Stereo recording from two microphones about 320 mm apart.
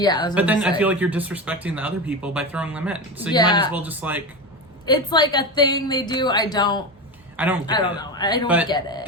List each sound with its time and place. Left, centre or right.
0.0 s a woman's voice: centre
0.3 s speech: centre
3.3 s a woman's voice: centre
3.8 s speech: centre
4.9 s a woman's voice: centre
7.3 s a man's voice: centre
7.7 s a woman's voice: centre